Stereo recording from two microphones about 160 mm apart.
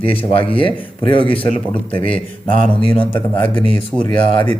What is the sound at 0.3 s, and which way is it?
Speech, 35° left (ahead or behind).